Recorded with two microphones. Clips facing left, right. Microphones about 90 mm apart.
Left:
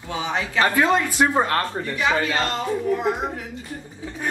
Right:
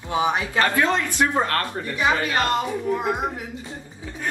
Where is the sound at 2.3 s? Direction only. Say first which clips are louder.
Right 1 dB; 20° right (ahead or behind).